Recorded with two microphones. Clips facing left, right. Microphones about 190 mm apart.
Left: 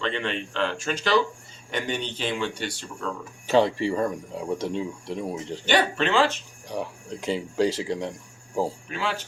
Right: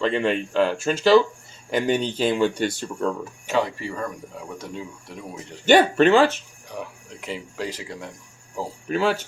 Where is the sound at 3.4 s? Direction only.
30° left (ahead or behind).